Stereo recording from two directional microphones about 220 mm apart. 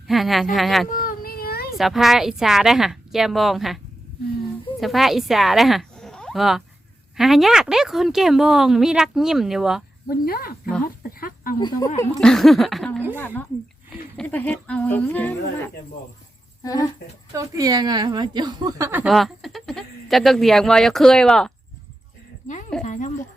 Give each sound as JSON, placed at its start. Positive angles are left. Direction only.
{"t": 0.1, "sound": "a woman's voice", "side_deg": 0}
{"t": 0.9, "sound": "child singing", "side_deg": 40}
{"t": 1.8, "sound": "a woman's voice", "side_deg": 0}
{"t": 4.8, "sound": "a woman's voice", "side_deg": 0}
{"t": 10.1, "sound": "speech", "side_deg": 40}
{"t": 11.2, "sound": "a sound", "side_deg": 40}
{"t": 11.9, "sound": "a woman's voice", "side_deg": 5}
{"t": 17.3, "sound": "a woman's voice", "side_deg": -15}
{"t": 22.8, "sound": "a sound", "side_deg": 35}